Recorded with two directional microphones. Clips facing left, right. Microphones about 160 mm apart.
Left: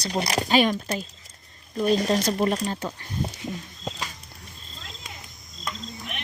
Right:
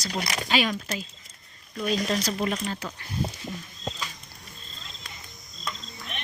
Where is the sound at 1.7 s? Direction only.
35° left (ahead or behind).